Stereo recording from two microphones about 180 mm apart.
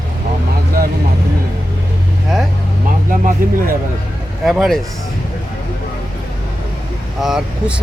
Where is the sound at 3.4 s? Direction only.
50° right (ahead or behind).